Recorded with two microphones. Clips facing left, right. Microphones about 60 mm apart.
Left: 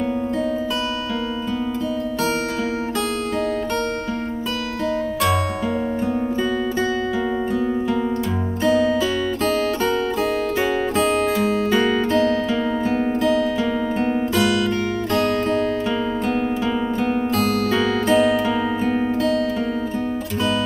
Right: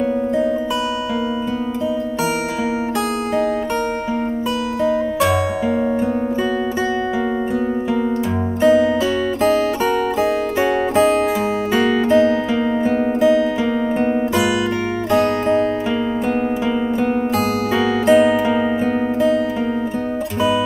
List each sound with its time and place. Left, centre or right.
8.6 s music: centre
10.6 s music: centre
17.0 s music: centre